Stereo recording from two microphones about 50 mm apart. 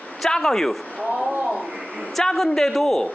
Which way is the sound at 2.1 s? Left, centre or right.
Centre.